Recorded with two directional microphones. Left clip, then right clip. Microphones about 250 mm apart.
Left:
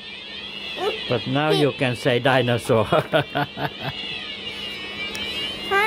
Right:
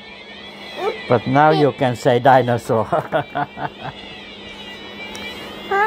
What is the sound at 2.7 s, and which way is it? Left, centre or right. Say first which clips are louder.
Speech: right 1 dB; left.